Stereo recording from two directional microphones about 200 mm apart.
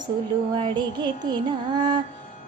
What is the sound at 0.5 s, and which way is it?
Music, 25° right (ahead or behind).